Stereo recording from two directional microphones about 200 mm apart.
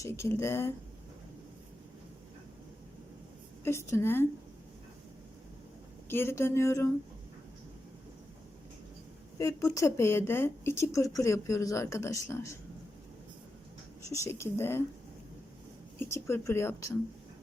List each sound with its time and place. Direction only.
0.0 s a woman's voice: 15° left (ahead or behind)
3.6 s a woman's voice: 15° left (ahead or behind)
6.1 s a woman's voice: 10° left (ahead or behind)
9.4 s a woman's voice: 15° left (ahead or behind)
14.1 s a woman's voice: 15° left (ahead or behind)
16.0 s a woman's voice: 15° left (ahead or behind)